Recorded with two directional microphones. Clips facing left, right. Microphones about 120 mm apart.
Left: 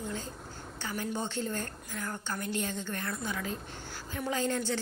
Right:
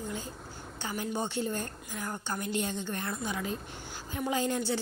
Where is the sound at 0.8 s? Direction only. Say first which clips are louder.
Right 1 dB; 20° right (ahead or behind).